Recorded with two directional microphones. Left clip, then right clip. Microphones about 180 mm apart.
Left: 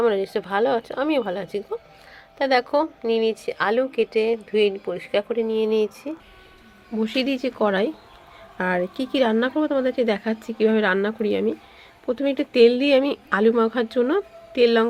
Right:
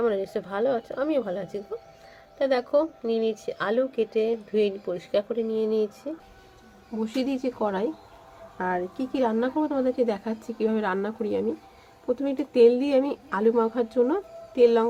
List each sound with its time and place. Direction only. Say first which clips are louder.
0.0 s speech: left 5 dB; 15° left (ahead or behind)
8.5 s speech: left 5 dB; 40° left (ahead or behind)